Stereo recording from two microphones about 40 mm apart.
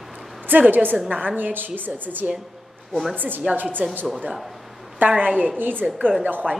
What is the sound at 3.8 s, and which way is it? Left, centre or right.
Speech, right.